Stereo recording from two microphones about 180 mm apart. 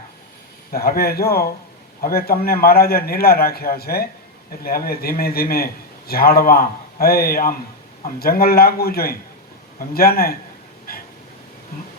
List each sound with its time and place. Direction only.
0.7 s a man's voice: 55° left (ahead or behind)
10.9 s dog: 55° left (ahead or behind)